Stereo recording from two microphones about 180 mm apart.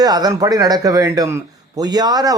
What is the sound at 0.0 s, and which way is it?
A man's voice, 20° right (ahead or behind).